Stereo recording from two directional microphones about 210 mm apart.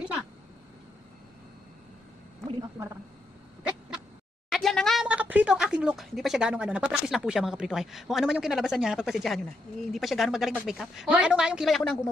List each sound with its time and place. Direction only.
2.8 s a woman's voice: 15° right (ahead or behind)
4.5 s speech: centre (ahead or behind)